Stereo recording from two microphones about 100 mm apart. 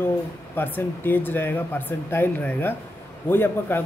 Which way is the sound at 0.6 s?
20° left (ahead or behind).